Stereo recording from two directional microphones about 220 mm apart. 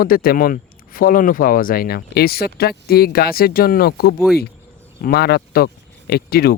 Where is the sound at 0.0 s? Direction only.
40° left (ahead or behind).